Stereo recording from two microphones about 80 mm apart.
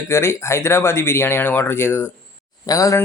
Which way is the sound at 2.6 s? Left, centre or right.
Left.